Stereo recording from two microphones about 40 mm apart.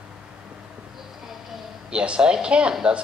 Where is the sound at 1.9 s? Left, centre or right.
Right.